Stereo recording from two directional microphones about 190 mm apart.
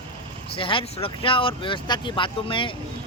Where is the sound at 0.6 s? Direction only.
30° left (ahead or behind).